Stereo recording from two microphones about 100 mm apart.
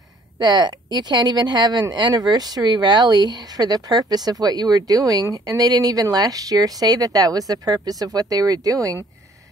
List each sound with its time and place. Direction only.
0.4 s speech: 45° right (ahead or behind)